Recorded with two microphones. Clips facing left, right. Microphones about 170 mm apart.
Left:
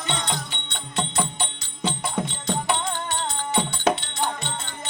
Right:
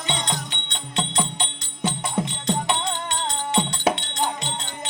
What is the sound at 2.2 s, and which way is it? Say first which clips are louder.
Music: right 3 dB; 20° right (ahead or behind).